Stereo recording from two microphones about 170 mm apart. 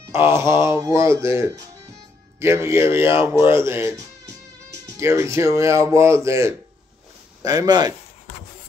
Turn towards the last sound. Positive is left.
turn(degrees=-20)  # may be behind; listen again after turning